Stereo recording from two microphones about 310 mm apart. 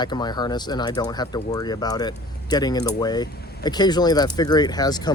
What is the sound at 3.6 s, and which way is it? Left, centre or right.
Speech, centre.